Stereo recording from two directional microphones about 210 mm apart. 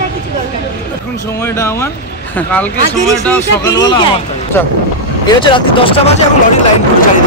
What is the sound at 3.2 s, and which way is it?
Speech, 15° left (ahead or behind).